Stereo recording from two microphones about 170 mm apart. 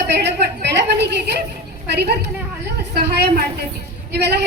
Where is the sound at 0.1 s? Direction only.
80° right.